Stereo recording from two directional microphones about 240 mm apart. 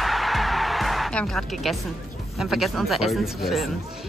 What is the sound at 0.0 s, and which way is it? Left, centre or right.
Music, centre.